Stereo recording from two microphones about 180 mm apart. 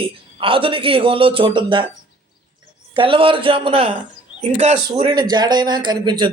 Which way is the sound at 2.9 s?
30° right (ahead or behind).